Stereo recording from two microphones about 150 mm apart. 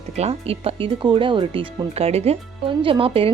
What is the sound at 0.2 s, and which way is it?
Speech, 40° right (ahead or behind).